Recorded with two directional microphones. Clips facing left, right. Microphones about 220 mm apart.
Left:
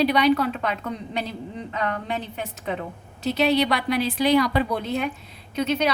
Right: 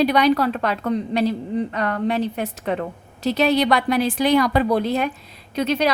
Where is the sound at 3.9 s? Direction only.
50° right (ahead or behind).